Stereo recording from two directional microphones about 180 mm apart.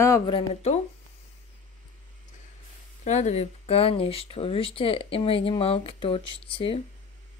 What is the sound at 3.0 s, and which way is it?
Speech, 40° left (ahead or behind).